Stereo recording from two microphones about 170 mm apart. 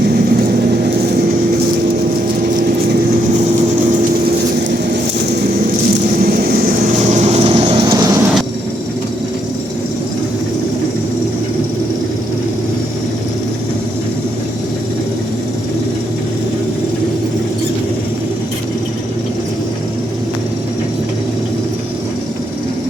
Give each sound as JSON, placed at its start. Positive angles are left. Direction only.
{"t": 6.1, "sound": "vehicle", "side_deg": -60}
{"t": 7.9, "sound": "vehicle", "side_deg": -20}